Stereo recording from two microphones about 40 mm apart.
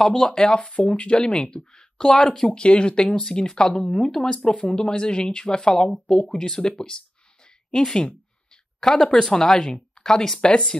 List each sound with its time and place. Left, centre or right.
0.0 s speech: centre
0.6 s speech: left
4.1 s speech: centre
7.7 s speech: centre